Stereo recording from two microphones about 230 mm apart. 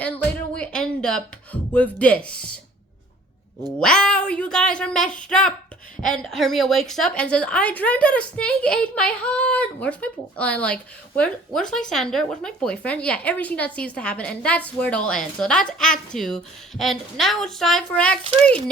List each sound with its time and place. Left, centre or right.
0.5 s music: centre
1.7 s speech: centre
3.8 s speech: centre
18.2 s a child's voice: right